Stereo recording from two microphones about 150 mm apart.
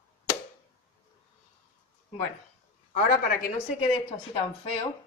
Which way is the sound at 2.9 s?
75° left (ahead or behind).